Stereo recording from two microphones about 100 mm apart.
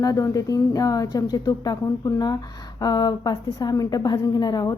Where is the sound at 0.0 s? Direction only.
35° left (ahead or behind).